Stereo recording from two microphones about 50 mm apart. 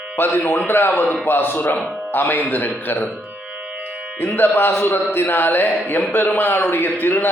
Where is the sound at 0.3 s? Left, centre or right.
Left.